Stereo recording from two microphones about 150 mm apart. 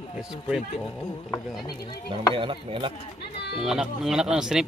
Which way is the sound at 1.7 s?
30° left (ahead or behind).